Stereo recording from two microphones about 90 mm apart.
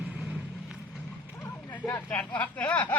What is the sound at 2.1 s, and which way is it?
Speech, 20° left (ahead or behind).